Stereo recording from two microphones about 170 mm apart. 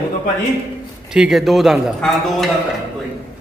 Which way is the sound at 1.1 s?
5° right (ahead or behind).